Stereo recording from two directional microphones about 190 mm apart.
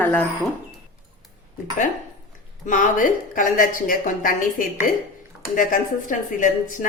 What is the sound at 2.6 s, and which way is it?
Speech, 45° left (ahead or behind).